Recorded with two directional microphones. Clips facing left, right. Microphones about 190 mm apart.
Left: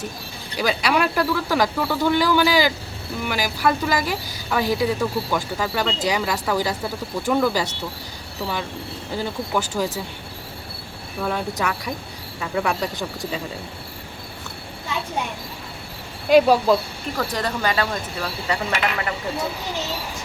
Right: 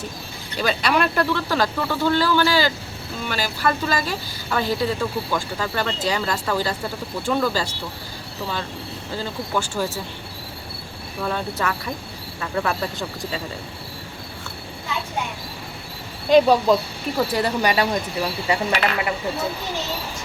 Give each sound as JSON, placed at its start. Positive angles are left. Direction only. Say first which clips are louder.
{"t": 0.5, "sound": "speech", "louder": "even", "side_deg": 10}
{"t": 9.1, "sound": "speech", "louder": "left 1 dB", "side_deg": 15}
{"t": 11.2, "sound": "speech", "louder": "left 1 dB", "side_deg": 10}
{"t": 16.3, "sound": "speech", "louder": "even", "side_deg": 5}
{"t": 17.2, "sound": "speech", "louder": "right 4 dB", "side_deg": -10}